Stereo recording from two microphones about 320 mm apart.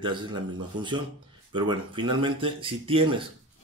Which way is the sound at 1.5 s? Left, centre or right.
Centre.